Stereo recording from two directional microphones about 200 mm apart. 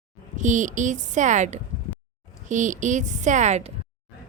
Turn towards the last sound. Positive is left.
turn(degrees=-35)  # may be behind; listen again after turning